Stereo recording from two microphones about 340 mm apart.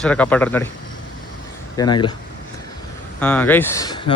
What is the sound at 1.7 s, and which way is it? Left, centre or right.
Speech, centre.